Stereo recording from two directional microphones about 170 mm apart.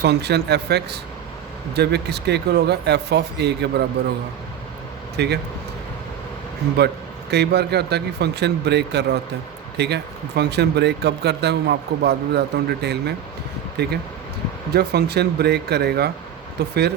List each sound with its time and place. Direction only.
0.0 s speech: 75° right (ahead or behind)
5.1 s speech: 75° right (ahead or behind)
6.7 s speech: 75° right (ahead or behind)